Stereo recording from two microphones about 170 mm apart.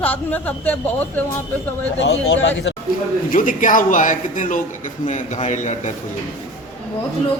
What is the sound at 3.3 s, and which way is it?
A man's voice, 55° left (ahead or behind).